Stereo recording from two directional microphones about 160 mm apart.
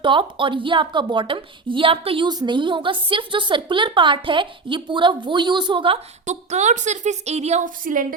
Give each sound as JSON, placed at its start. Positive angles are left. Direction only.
{"t": 0.0, "sound": "a woman's voice", "side_deg": -30}
{"t": 6.2, "sound": "a woman's voice", "side_deg": -45}